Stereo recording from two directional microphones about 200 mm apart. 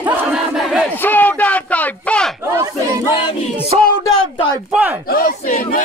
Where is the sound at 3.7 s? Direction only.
35° right (ahead or behind).